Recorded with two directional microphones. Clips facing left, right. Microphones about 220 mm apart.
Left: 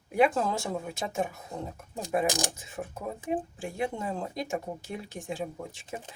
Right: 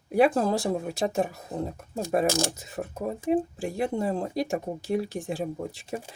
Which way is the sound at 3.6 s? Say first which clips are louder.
Right 5 dB; 35° right (ahead or behind).